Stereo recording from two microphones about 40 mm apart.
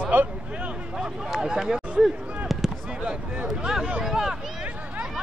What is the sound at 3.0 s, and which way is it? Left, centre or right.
Speech, centre.